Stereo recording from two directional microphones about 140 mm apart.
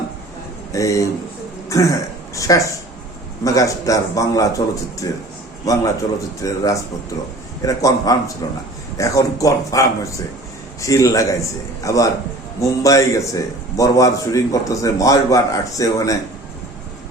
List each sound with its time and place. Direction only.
0.7 s a man's voice: 25° left (ahead or behind)